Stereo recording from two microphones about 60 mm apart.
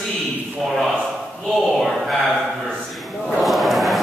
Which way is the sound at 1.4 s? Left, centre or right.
Centre.